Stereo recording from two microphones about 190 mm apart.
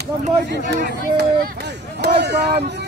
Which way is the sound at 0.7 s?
60° right (ahead or behind).